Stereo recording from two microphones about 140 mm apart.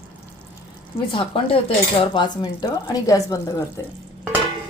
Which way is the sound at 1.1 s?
40° left (ahead or behind).